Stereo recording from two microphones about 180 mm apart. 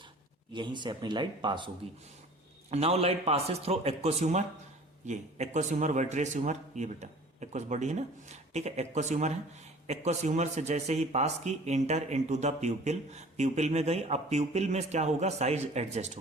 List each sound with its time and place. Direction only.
0.5 s speech: 25° right (ahead or behind)
2.6 s a man's voice: 35° right (ahead or behind)